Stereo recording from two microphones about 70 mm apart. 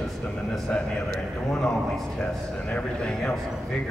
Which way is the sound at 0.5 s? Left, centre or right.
Centre.